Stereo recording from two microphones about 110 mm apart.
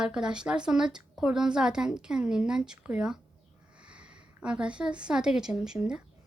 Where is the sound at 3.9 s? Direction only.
10° right (ahead or behind).